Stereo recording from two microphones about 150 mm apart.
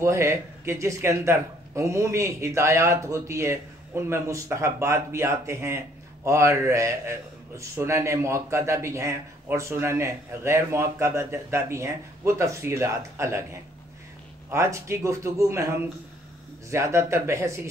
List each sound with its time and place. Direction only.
0.0 s a man's voice: 20° right (ahead or behind)
16.7 s a man's voice: 20° right (ahead or behind)